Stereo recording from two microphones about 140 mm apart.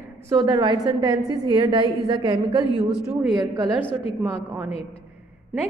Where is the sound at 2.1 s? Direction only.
45° right (ahead or behind).